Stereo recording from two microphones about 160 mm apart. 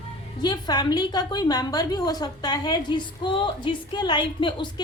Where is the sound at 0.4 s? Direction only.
25° left (ahead or behind).